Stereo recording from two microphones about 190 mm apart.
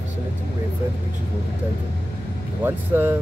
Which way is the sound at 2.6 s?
10° right (ahead or behind).